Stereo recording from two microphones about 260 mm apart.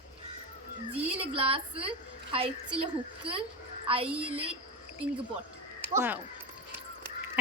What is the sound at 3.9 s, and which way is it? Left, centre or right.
Speech, right.